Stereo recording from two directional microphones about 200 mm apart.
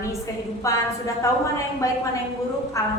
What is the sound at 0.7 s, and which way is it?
Speech, 15° left (ahead or behind).